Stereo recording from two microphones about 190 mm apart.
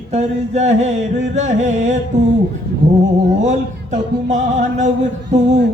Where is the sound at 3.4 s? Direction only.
40° right (ahead or behind).